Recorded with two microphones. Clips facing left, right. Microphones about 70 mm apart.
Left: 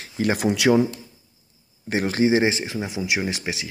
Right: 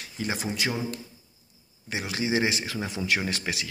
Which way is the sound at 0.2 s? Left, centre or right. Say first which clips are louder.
Left 9 dB; left.